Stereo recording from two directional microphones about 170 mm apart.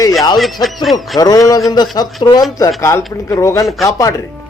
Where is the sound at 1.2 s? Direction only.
20° left (ahead or behind).